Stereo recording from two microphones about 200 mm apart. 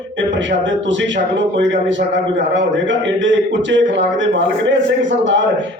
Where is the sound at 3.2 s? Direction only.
65° right (ahead or behind).